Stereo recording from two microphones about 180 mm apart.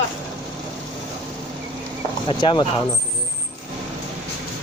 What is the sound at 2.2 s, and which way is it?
Speech, 25° left (ahead or behind).